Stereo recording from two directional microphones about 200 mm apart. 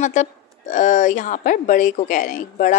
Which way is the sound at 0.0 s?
40° left (ahead or behind).